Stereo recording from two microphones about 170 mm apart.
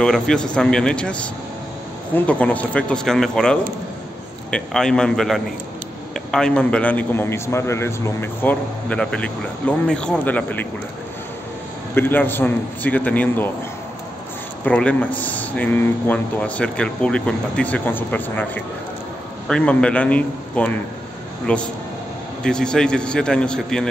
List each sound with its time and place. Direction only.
0.0 s a man's voice: 5° left (ahead or behind)
11.9 s a man's voice: 10° left (ahead or behind)
14.6 s a man's voice: 5° left (ahead or behind)